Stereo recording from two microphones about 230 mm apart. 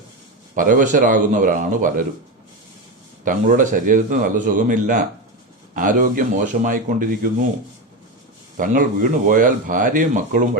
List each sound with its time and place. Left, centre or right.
0.5 s speech: right
3.2 s speech: right
8.5 s speech: right